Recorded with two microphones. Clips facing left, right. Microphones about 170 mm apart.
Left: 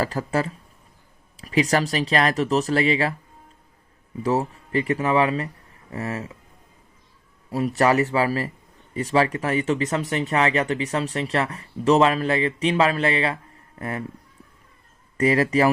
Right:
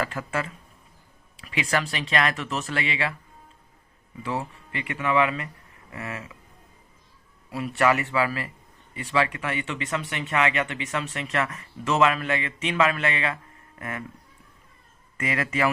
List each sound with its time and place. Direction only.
0.0 s speech: 35° left (ahead or behind)
4.2 s speech: 40° left (ahead or behind)
7.5 s speech: 40° left (ahead or behind)
15.2 s speech: 35° left (ahead or behind)